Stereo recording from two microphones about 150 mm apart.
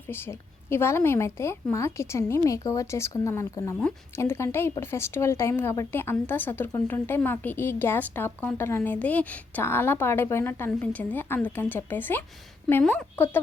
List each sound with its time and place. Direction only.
0.1 s a woman's voice: 15° left (ahead or behind)
3.8 s speech: 5° left (ahead or behind)
4.2 s speech: 15° left (ahead or behind)